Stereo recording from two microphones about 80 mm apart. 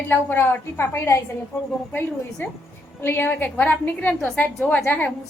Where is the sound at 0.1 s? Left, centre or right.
Left.